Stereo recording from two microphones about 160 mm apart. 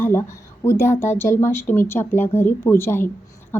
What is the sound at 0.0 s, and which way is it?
Speech, 15° left (ahead or behind).